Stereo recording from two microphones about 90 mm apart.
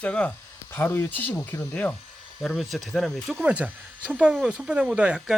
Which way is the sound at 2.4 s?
Centre (ahead or behind).